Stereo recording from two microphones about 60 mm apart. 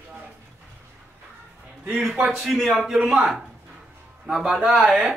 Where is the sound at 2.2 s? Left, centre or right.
Centre.